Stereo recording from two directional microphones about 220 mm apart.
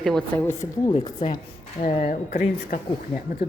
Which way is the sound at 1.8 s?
35° left (ahead or behind).